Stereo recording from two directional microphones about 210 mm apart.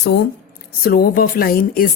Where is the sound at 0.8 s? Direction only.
45° left (ahead or behind).